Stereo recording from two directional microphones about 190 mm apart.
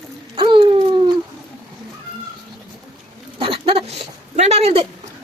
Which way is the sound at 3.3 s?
30° right (ahead or behind).